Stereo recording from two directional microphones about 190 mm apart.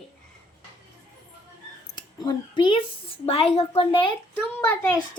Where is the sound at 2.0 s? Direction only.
25° left (ahead or behind).